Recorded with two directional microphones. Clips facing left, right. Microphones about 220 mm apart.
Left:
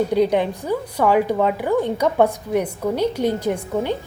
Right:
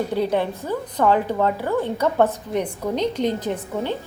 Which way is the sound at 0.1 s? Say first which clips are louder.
Left 4 dB; 15° left (ahead or behind).